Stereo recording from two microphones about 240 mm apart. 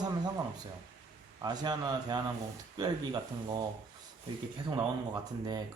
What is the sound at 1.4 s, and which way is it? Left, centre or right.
Speech, centre.